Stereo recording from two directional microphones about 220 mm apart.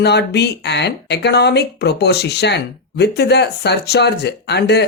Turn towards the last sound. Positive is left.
turn(degrees=50)  # may be behind; listen again after turning